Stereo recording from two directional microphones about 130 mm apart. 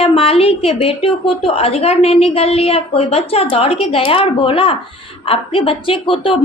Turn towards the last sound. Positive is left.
turn(degrees=40)  # may be behind; listen again after turning